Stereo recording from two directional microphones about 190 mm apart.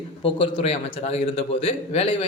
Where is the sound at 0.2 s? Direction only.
25° left (ahead or behind).